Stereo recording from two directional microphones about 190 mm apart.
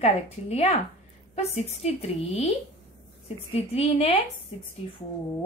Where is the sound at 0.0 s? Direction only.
35° left (ahead or behind).